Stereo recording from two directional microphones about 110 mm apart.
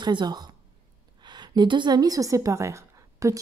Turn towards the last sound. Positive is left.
turn(degrees=-30)  # may be behind; listen again after turning